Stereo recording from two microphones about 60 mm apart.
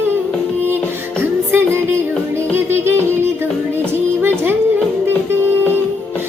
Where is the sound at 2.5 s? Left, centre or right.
Right.